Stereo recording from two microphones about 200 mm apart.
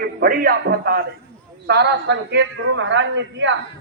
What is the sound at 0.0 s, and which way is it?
A man's voice, 50° right (ahead or behind).